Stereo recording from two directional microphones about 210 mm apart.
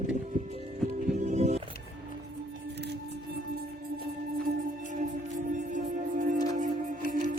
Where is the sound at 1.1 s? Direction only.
35° right (ahead or behind).